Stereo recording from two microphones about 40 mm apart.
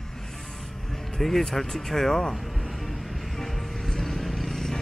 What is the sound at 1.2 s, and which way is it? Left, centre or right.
Speech, centre.